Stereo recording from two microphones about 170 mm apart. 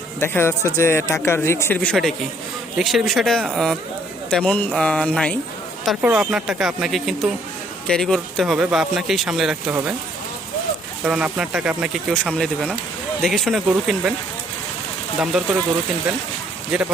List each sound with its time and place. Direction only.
0.2 s speech: 15° left (ahead or behind)
5.8 s speech: 5° right (ahead or behind)
11.0 s speech: 5° right (ahead or behind)
12.1 s speech: 5° left (ahead or behind)
15.2 s speech: 5° right (ahead or behind)
16.7 s speech: centre (ahead or behind)